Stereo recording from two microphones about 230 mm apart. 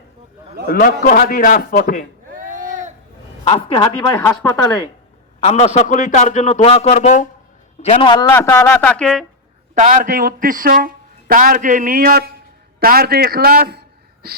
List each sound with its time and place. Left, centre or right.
1.0 s a man's voice: left
2.3 s a sound: right
3.4 s speech: left
5.4 s a man's voice: left; by 9.2 s centre
9.7 s a man's voice: right